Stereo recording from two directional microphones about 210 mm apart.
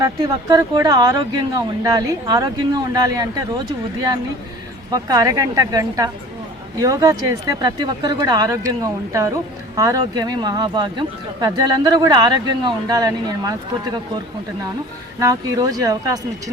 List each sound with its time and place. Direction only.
0.0 s speech: 15° right (ahead or behind)
4.9 s speech: 15° right (ahead or behind)
15.2 s speech: 15° right (ahead or behind)